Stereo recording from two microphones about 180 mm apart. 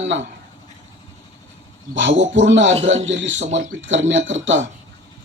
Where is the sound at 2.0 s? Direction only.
90° right.